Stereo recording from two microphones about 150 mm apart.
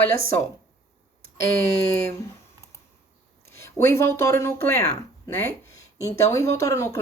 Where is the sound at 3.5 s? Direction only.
15° left (ahead or behind).